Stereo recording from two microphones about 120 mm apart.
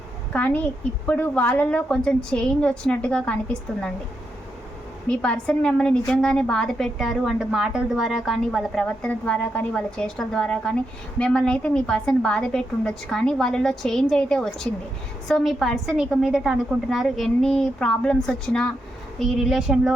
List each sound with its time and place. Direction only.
0.3 s a woman's voice: 10° left (ahead or behind)
5.0 s a woman's voice: 10° left (ahead or behind)